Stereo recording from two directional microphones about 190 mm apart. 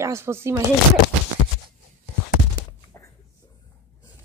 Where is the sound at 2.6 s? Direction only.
20° left (ahead or behind).